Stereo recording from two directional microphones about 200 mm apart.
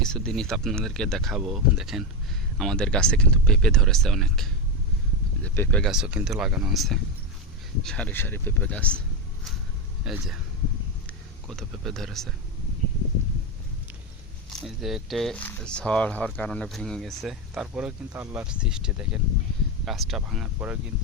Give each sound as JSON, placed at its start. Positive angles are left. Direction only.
{"t": 0.0, "sound": "speech", "side_deg": 5}
{"t": 10.0, "sound": "speech", "side_deg": 0}
{"t": 14.6, "sound": "speech", "side_deg": 0}